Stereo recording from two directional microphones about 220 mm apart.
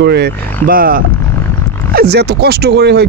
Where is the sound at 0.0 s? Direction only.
50° right (ahead or behind).